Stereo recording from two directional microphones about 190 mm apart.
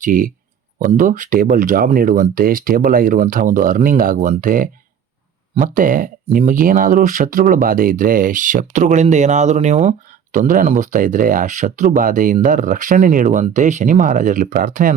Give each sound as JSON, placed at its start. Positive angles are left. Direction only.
{"t": 0.0, "sound": "speech", "side_deg": -45}